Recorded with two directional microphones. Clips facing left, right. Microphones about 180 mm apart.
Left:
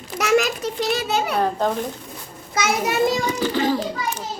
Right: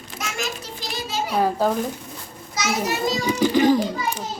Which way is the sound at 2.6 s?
55° left (ahead or behind).